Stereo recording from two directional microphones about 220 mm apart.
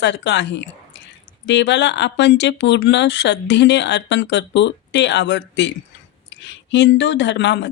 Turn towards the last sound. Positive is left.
turn(degrees=55)  # may be behind; listen again after turning